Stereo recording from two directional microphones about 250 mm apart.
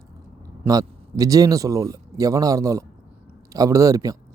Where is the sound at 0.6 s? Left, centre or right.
Centre.